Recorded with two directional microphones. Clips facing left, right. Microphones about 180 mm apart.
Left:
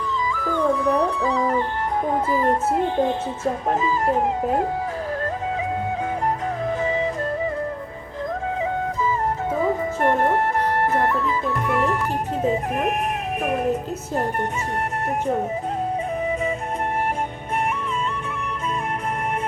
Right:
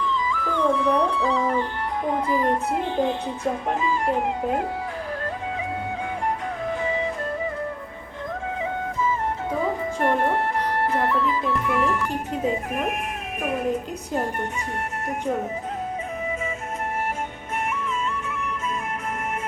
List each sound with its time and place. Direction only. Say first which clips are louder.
0.3 s music: left 3 dB; 40° left (ahead or behind)
2.2 s speech: left 2 dB; 40° left (ahead or behind)
10.0 s music: left 2 dB; 45° left (ahead or behind)